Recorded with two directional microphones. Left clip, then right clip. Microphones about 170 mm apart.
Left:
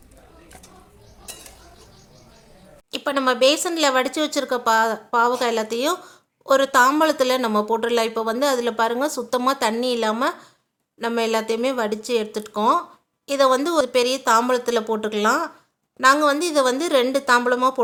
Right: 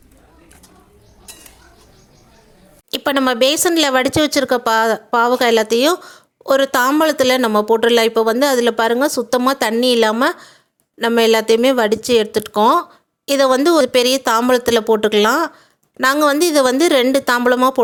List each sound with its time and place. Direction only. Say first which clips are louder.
2.9 s a woman's voice: right 4 dB; 40° right (ahead or behind)